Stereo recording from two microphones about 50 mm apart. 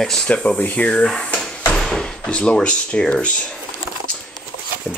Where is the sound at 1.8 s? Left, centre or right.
Centre.